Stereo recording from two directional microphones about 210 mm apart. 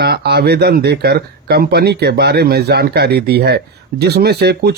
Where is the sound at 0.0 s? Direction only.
50° right (ahead or behind).